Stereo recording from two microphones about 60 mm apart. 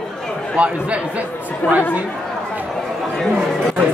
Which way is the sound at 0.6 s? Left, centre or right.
Right.